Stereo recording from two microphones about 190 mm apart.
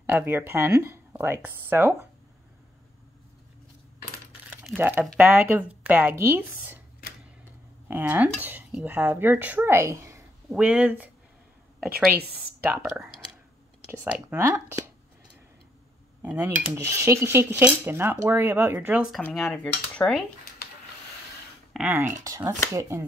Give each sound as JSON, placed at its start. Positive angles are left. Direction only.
{"t": 0.0, "sound": "speech", "side_deg": -10}
{"t": 4.5, "sound": "speech", "side_deg": -10}
{"t": 7.9, "sound": "speech", "side_deg": -10}
{"t": 14.1, "sound": "speech", "side_deg": -15}
{"t": 16.2, "sound": "speech", "side_deg": -10}
{"t": 19.2, "sound": "cutlery", "side_deg": 5}
{"t": 21.7, "sound": "speech", "side_deg": -10}